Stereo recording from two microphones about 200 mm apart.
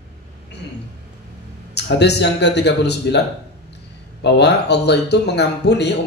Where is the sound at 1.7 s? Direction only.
55° left (ahead or behind).